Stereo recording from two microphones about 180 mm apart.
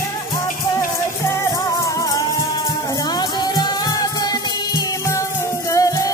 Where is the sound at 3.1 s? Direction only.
20° left (ahead or behind).